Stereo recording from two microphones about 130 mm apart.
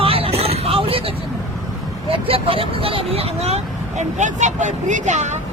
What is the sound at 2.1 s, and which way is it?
Speech, 45° right (ahead or behind).